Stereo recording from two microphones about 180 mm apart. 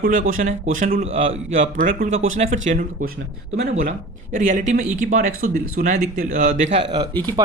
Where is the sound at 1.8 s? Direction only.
50° right (ahead or behind).